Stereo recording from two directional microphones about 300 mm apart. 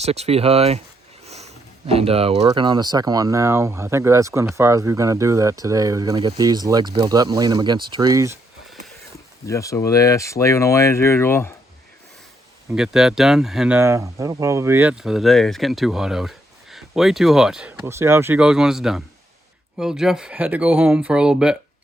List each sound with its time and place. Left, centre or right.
0.0 s speech: right
1.9 s speech: centre
7.9 s a sound: centre
9.5 s speech: centre
12.7 s speech: centre